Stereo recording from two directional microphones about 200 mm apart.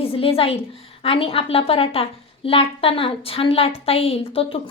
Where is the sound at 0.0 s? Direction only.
30° left (ahead or behind).